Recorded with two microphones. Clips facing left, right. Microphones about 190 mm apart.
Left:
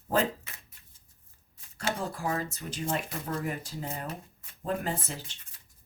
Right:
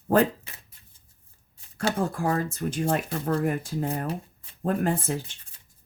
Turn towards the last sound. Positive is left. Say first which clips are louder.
# right 8 dB
turn(degrees=-50)  # may be behind; listen again after turning